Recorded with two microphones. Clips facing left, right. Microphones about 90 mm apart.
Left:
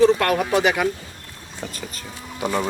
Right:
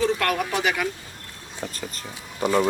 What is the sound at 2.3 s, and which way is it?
Speech, centre (ahead or behind).